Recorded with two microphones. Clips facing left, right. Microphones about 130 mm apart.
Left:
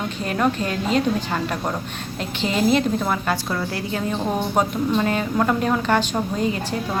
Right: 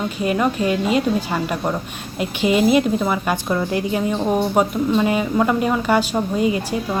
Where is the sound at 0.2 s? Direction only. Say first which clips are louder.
Right 3 dB; 5° right (ahead or behind).